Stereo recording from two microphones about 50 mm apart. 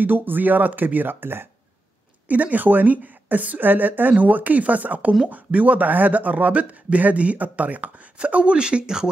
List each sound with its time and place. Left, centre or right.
0.0 s speech: right
2.2 s speech: right